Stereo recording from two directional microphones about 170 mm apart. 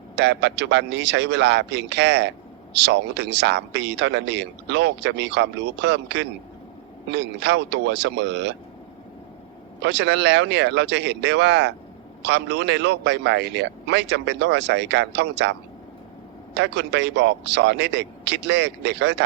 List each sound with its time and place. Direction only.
0.2 s speech: 90° right
9.8 s speech: 90° right
16.6 s speech: 90° right